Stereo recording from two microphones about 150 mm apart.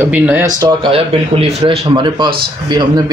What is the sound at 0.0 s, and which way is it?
Speech, 10° right (ahead or behind).